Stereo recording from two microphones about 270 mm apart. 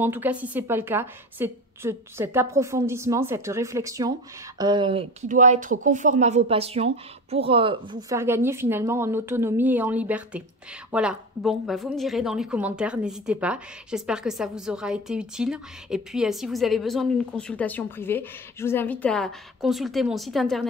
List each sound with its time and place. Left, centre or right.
0.0 s a woman's voice: centre